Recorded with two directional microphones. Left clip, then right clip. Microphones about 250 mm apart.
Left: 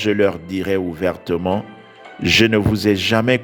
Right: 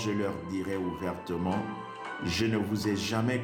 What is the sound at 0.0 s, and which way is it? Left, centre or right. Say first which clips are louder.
Speech: left 15 dB; left.